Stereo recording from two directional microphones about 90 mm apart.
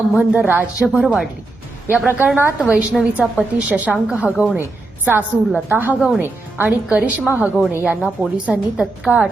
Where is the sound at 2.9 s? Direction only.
10° right (ahead or behind); by 7.9 s 25° right (ahead or behind).